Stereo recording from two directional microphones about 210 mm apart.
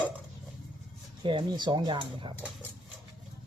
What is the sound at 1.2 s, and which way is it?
Speech, 20° right (ahead or behind).